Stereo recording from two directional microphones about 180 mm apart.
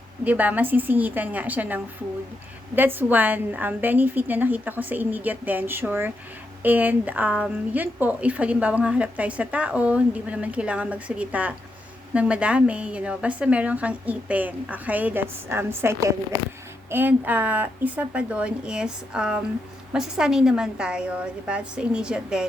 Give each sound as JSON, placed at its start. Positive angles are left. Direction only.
{"t": 0.3, "sound": "a woman's voice", "side_deg": -10}